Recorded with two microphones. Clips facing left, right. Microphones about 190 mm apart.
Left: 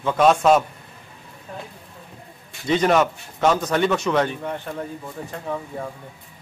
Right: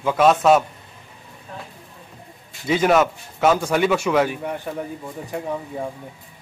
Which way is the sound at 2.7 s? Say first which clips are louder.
Right 1 dB; 5° right (ahead or behind).